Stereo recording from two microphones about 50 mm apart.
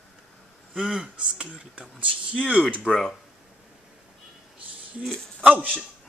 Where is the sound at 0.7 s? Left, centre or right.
Centre.